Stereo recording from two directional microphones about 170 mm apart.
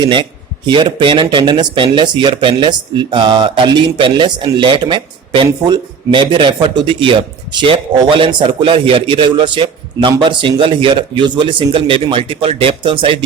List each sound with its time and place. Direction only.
0.0 s speech: 30° right (ahead or behind)